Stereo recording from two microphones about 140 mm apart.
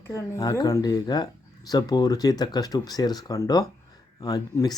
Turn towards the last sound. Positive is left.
turn(degrees=25)  # may be behind; listen again after turning